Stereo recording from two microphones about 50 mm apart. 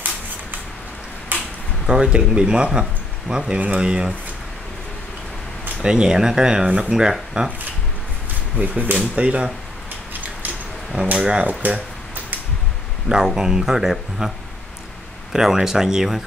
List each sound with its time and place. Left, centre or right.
1.3 s a sound: right
1.9 s speech: centre
5.8 s speech: centre
8.5 s speech: right
11.1 s speech: centre
11.4 s speech: right
13.1 s speech: centre
15.3 s speech: centre